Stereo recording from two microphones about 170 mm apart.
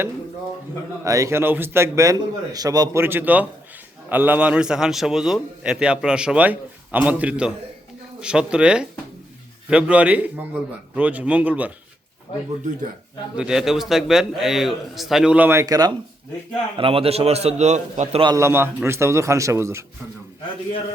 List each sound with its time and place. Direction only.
1.0 s a man's voice: 20° right (ahead or behind)
13.3 s a man's voice: 5° right (ahead or behind); by 15.9 s 20° right (ahead or behind)
16.7 s a man's voice: 30° right (ahead or behind)
18.2 s a man's voice: 20° right (ahead or behind)